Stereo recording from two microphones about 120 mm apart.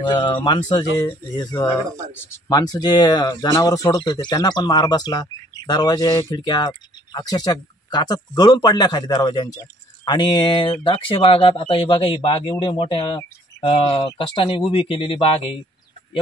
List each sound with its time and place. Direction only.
0.0 s speech: 40° left (ahead or behind)
2.2 s speech: 20° left (ahead or behind)
2.5 s speech: 35° left (ahead or behind)